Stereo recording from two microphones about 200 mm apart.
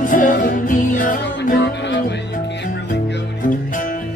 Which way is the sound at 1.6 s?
60° left (ahead or behind).